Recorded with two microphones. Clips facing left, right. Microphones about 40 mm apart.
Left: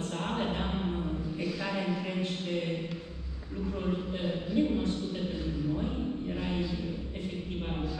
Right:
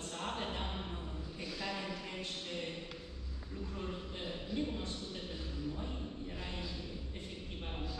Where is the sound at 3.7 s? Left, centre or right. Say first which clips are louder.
Left 10 dB; left.